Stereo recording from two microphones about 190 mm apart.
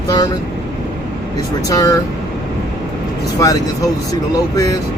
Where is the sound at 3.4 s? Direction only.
20° left (ahead or behind).